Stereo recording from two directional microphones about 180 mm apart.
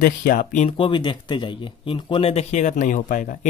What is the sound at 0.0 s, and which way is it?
Speech, 50° left (ahead or behind).